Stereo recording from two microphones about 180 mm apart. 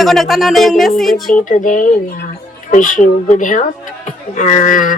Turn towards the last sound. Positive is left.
turn(degrees=45)  # may be behind; listen again after turning